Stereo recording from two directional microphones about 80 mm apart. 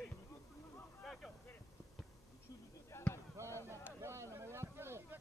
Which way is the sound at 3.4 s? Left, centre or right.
Right.